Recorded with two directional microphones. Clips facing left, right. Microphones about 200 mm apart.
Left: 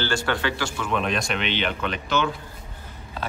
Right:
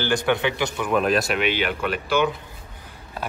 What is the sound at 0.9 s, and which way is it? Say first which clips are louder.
A man's voice: right 5 dB; 5° right (ahead or behind).